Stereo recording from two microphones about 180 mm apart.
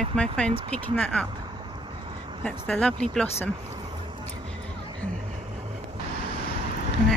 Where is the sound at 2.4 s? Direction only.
5° left (ahead or behind).